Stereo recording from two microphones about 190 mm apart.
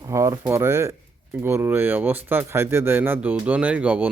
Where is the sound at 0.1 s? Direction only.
15° right (ahead or behind).